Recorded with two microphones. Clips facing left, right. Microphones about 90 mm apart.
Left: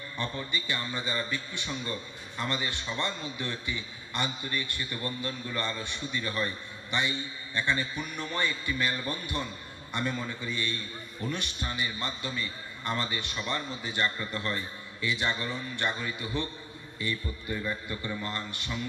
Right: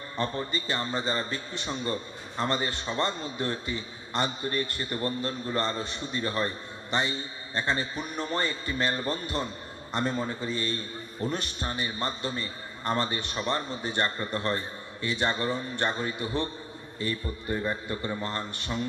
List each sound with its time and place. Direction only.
0.2 s a man's voice: 35° right (ahead or behind)